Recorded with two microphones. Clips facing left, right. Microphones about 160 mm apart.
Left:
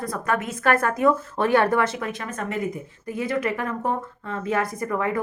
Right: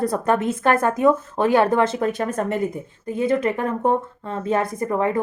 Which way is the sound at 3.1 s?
25° right (ahead or behind).